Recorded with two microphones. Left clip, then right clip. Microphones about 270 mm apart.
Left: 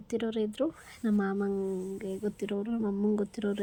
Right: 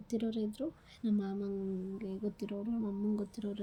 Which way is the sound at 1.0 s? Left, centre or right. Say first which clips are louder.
Left 7 dB; left.